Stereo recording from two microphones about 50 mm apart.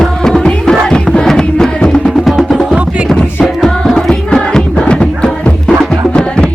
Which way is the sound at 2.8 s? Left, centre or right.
Right.